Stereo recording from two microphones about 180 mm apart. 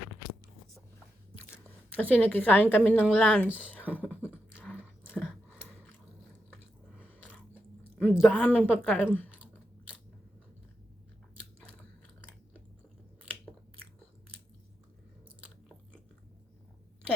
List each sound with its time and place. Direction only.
2.0 s a woman's voice: 10° left (ahead or behind)
3.9 s beatboxing: 10° left (ahead or behind)
5.5 s a sound: centre (ahead or behind)
7.0 s chewing: 10° left (ahead or behind)
8.1 s a woman's voice: 5° right (ahead or behind)
8.6 s a woman's voice: 10° left (ahead or behind)